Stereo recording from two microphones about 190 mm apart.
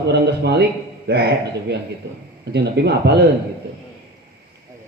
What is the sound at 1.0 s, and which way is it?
Speech, 60° right (ahead or behind).